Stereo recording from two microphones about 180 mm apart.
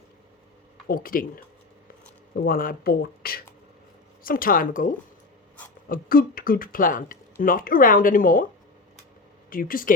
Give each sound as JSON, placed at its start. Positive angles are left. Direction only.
{"t": 0.9, "sound": "speech", "side_deg": 50}
{"t": 2.3, "sound": "speech", "side_deg": 55}
{"t": 9.5, "sound": "speech", "side_deg": 50}